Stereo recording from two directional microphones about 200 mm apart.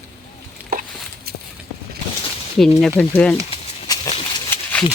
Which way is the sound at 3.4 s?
30° left (ahead or behind).